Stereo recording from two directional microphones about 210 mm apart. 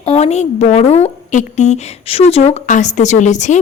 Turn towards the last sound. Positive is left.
turn(degrees=35)  # may be behind; listen again after turning